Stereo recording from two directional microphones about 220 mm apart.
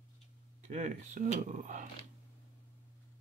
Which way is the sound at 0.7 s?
35° right (ahead or behind).